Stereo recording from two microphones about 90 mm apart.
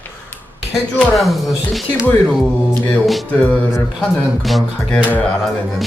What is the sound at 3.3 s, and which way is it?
Speech, 15° left (ahead or behind).